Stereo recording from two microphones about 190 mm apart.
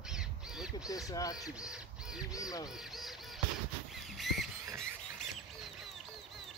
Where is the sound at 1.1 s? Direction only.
20° left (ahead or behind).